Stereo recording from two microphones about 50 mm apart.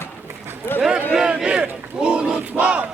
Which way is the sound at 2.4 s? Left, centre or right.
Right.